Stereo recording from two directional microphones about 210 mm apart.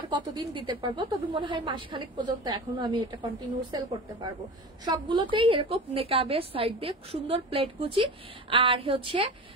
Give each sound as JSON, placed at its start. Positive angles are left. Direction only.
{"t": 0.1, "sound": "a woman's voice", "side_deg": -20}
{"t": 4.8, "sound": "a woman's voice", "side_deg": -25}